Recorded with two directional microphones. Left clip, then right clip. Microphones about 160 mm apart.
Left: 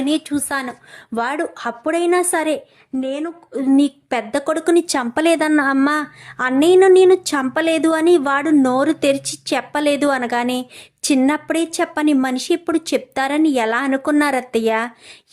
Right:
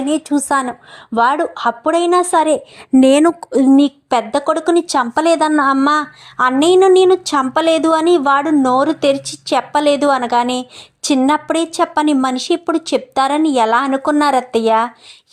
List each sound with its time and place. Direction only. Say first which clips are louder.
0.2 s a woman's voice: right 6 dB; 10° right (ahead or behind)
0.4 s a woman's voice: right 7 dB; 20° right (ahead or behind)
0.7 s a woman's voice: right 5 dB; centre (ahead or behind)
3.0 s a woman's voice: right 14 dB; 55° right (ahead or behind)
3.7 s a woman's voice: right 2 dB; centre (ahead or behind)